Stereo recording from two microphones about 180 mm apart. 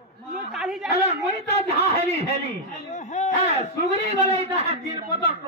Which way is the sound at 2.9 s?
40° left (ahead or behind).